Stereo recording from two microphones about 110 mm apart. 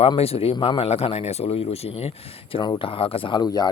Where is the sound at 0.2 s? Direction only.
65° left (ahead or behind).